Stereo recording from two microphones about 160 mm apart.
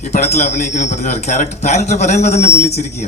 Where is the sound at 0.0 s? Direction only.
45° left (ahead or behind).